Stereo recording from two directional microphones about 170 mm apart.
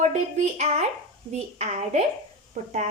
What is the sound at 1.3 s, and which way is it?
Speech, 40° right (ahead or behind).